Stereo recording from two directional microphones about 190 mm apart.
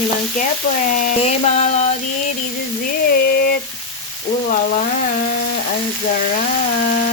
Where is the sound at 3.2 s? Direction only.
55° left (ahead or behind).